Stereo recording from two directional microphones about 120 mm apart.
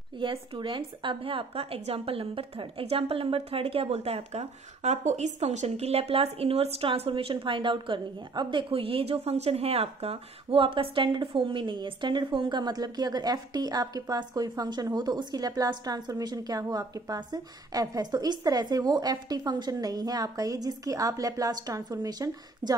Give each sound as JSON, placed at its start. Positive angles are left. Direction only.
{"t": 0.2, "sound": "a woman's voice", "side_deg": -45}